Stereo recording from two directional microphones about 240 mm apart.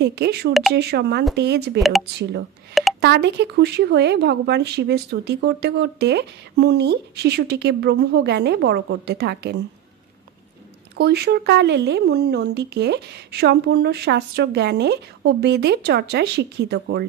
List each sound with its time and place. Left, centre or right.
0.0 s speech: right
0.5 s speech: centre
0.7 s speech: right
1.8 s speech: centre
3.0 s speech: right
11.0 s speech: right